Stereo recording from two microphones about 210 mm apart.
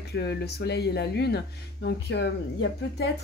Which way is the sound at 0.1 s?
50° left (ahead or behind).